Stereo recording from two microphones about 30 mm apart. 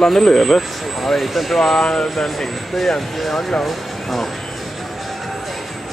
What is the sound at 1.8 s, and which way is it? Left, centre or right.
Speech, left.